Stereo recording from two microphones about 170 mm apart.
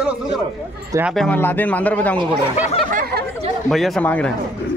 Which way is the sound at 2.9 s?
60° right (ahead or behind).